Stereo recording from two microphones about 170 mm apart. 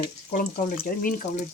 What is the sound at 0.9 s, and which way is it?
Speech, 55° left (ahead or behind).